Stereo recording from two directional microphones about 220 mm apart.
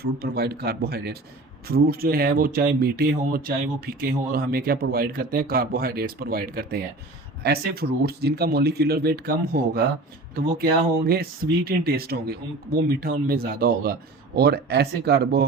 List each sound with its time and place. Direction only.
0.0 s speech: 45° right (ahead or behind)